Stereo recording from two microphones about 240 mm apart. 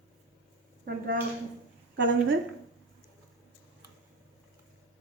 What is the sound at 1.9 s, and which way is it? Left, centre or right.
Speech, right.